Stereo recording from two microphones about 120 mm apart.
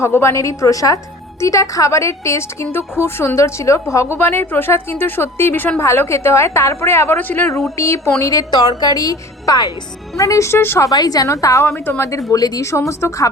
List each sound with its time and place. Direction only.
0.0 s a woman's voice: 20° left (ahead or behind)